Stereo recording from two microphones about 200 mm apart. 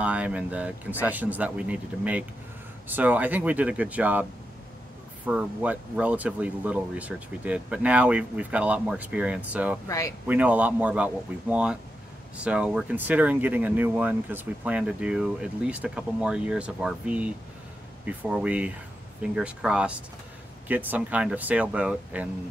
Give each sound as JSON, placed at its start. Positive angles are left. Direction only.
{"t": 0.0, "sound": "speech", "side_deg": -5}
{"t": 9.8, "sound": "speech", "side_deg": 15}
{"t": 10.2, "sound": "speech", "side_deg": -10}